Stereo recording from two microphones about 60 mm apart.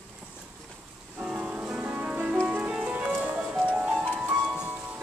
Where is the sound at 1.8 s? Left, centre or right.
Right.